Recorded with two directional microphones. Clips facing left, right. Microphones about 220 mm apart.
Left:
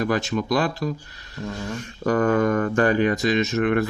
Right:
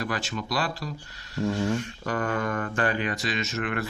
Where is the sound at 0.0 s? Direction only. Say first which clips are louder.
Left 8 dB; 50° left (ahead or behind).